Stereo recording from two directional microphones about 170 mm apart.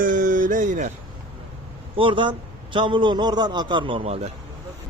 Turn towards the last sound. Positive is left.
turn(degrees=-35)  # may be behind; listen again after turning